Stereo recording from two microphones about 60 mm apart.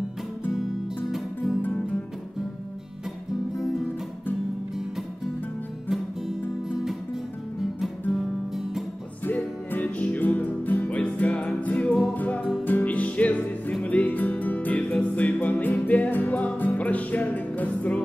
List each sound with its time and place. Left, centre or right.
1.1 s music: centre
8.1 s music: centre
9.2 s music: left